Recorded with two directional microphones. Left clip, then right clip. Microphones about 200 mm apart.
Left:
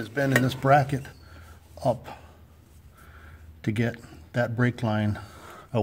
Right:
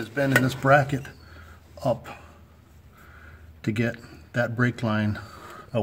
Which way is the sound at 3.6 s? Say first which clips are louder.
Right 1 dB; 15° left (ahead or behind).